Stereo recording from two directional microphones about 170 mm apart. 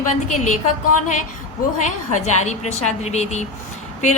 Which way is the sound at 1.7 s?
45° left (ahead or behind).